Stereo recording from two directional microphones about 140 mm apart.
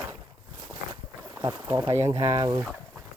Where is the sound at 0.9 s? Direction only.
20° right (ahead or behind).